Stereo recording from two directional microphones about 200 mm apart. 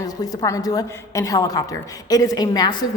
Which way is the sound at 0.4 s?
15° left (ahead or behind).